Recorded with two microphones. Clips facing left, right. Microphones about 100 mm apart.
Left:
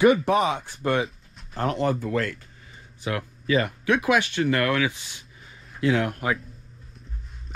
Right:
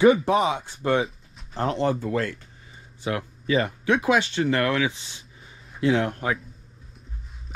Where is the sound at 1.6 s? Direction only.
25° right (ahead or behind).